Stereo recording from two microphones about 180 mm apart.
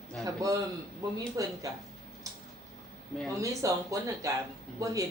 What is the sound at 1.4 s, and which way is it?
Speech, 20° right (ahead or behind).